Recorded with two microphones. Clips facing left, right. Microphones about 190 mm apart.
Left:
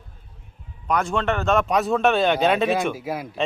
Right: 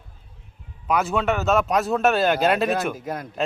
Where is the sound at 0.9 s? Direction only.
5° right (ahead or behind).